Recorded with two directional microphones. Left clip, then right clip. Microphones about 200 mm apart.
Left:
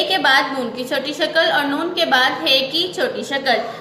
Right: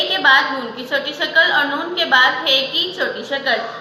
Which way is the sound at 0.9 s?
60° left (ahead or behind).